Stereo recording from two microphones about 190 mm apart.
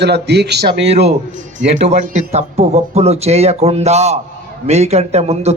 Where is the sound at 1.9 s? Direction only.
35° right (ahead or behind).